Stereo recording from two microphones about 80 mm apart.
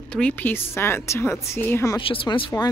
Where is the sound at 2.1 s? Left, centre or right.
Left.